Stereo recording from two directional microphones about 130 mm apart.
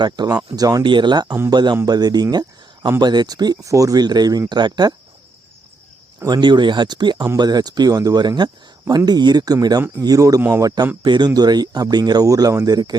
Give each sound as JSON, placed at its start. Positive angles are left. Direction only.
{"t": 0.0, "sound": "speech", "side_deg": -35}
{"t": 6.2, "sound": "a man's voice", "side_deg": -35}
{"t": 11.0, "sound": "speech", "side_deg": -35}